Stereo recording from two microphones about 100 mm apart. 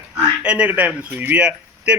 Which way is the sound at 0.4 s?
10° right (ahead or behind).